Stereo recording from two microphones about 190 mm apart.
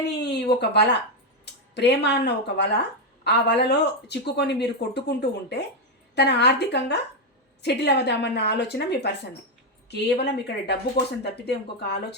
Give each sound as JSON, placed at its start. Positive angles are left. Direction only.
{"t": 0.2, "sound": "speech", "side_deg": 60}